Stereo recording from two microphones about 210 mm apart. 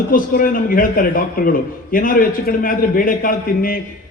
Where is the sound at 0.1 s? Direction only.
40° left (ahead or behind).